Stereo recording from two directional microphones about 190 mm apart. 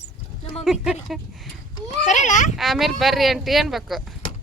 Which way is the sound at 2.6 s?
Centre (ahead or behind).